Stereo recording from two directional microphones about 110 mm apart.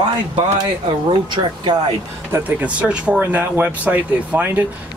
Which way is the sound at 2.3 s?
10° right (ahead or behind).